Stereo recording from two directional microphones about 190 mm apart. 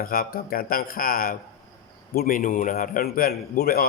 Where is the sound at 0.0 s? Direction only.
50° left (ahead or behind).